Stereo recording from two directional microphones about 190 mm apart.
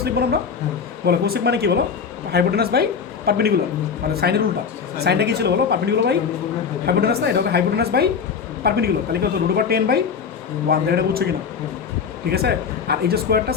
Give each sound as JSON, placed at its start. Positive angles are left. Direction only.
{"t": 0.0, "sound": "a woman's voice", "side_deg": -55}
{"t": 12.3, "sound": "a woman's voice", "side_deg": -55}